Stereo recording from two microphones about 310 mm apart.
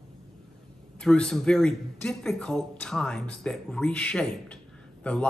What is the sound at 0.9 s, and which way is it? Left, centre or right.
Speech, centre.